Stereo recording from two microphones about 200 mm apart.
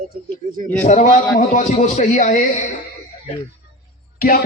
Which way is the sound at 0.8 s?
35° left (ahead or behind).